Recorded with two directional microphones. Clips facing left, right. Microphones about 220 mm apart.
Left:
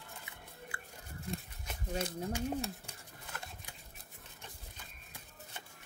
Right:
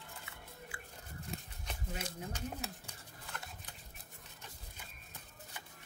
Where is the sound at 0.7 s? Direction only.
60° left (ahead or behind).